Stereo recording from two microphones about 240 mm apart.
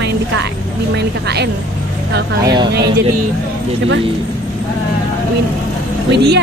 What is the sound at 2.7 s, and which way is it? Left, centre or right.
Speech, right.